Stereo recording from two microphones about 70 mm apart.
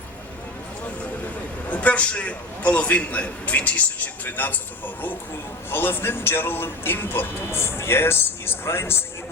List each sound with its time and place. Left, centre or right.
1.7 s a man's voice: centre
5.7 s a man's voice: left